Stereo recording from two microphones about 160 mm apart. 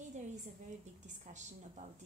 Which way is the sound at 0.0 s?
50° right (ahead or behind).